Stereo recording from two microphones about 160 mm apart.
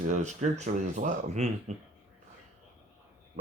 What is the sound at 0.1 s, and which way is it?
Speech, 50° right (ahead or behind).